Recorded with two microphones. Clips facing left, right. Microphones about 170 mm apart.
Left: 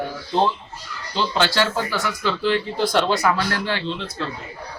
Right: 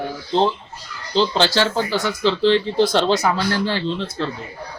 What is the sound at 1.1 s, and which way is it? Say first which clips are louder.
A man's voice: right 4 dB; 30° right (ahead or behind).